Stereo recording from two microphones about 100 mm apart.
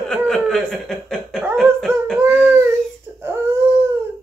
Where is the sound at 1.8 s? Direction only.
5° left (ahead or behind).